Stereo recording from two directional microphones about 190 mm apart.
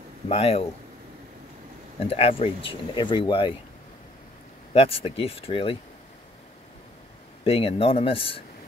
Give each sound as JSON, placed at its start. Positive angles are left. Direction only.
{"t": 0.3, "sound": "speech", "side_deg": 30}
{"t": 2.0, "sound": "speech", "side_deg": 30}
{"t": 4.7, "sound": "speech", "side_deg": 30}
{"t": 7.4, "sound": "speech", "side_deg": 30}